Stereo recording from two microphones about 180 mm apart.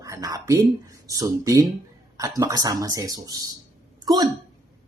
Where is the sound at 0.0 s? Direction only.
20° right (ahead or behind).